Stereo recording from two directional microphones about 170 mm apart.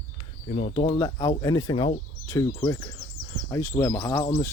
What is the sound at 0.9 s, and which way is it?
Speech, 20° left (ahead or behind).